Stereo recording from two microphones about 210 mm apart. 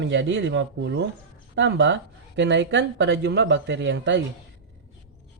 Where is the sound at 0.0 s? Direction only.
60° right (ahead or behind).